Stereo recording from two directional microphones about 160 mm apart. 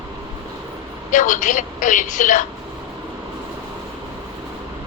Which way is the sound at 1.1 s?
55° left (ahead or behind).